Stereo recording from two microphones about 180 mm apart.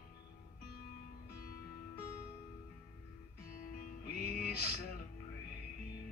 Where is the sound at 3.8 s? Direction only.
55° left (ahead or behind).